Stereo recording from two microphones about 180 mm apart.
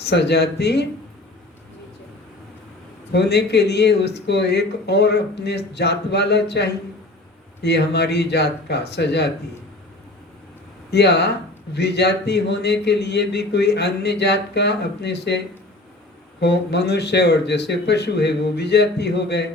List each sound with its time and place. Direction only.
0.0 s a man's voice: 70° left (ahead or behind)
3.1 s a man's voice: 65° left (ahead or behind)
10.9 s a man's voice: 70° left (ahead or behind)